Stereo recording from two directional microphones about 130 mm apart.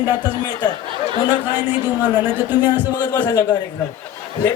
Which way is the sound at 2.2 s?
15° right (ahead or behind).